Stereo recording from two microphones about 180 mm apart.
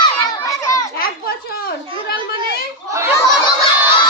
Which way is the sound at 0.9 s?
55° left (ahead or behind).